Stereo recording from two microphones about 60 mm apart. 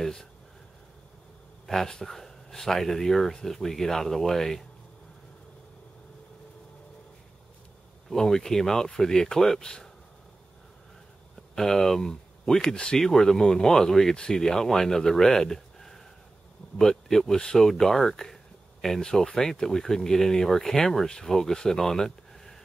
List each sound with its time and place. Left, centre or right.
0.0 s speech: centre
1.7 s speech: centre
8.1 s speech: centre
11.5 s speech: centre